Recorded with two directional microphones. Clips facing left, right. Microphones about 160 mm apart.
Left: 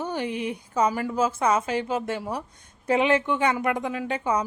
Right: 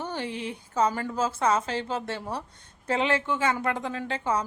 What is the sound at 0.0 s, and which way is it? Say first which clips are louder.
A woman's voice: left 4 dB; 15° left (ahead or behind).